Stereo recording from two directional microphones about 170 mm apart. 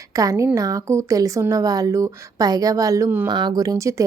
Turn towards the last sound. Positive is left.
turn(degrees=-20)  # may be behind; listen again after turning